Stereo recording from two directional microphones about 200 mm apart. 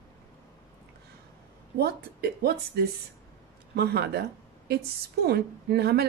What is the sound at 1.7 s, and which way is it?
Speech, 50° right (ahead or behind).